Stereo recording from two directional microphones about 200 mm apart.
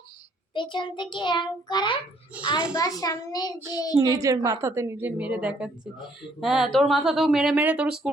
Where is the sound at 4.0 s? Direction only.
15° right (ahead or behind).